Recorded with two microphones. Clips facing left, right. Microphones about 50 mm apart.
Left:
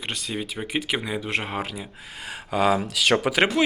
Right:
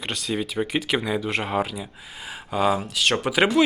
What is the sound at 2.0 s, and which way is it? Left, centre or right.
Speech, left.